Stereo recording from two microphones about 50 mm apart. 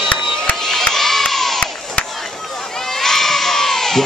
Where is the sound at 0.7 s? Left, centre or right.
Centre.